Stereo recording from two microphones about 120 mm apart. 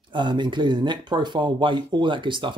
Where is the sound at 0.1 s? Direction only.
40° right (ahead or behind).